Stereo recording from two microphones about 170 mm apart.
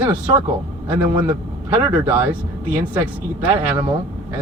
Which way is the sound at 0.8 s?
10° right (ahead or behind).